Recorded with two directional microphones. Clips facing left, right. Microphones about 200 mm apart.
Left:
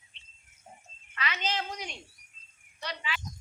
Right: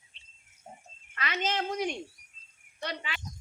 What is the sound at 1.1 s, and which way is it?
Cricket, 50° right (ahead or behind).